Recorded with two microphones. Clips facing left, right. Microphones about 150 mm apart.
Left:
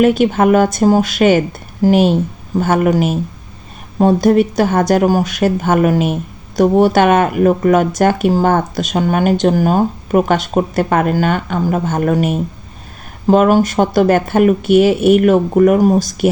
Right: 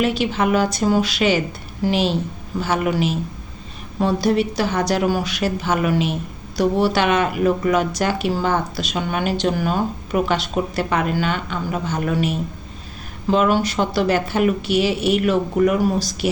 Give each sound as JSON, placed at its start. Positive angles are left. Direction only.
{"t": 0.0, "sound": "speech", "side_deg": 50}